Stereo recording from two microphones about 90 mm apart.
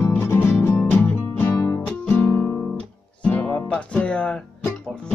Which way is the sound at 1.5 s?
40° left (ahead or behind).